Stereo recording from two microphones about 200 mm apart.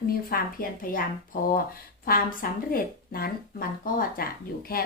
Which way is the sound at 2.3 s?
45° left (ahead or behind).